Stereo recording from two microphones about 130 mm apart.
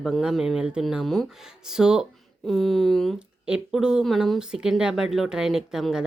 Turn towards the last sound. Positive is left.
turn(degrees=-5)  # may be behind; listen again after turning